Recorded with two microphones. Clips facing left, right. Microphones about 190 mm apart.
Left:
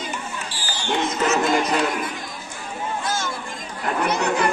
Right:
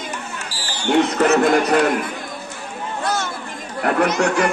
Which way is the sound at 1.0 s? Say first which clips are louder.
Right 6 dB; 60° right (ahead or behind).